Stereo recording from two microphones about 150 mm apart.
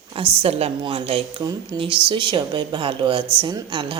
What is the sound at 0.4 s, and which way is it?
A woman's voice, 40° right (ahead or behind).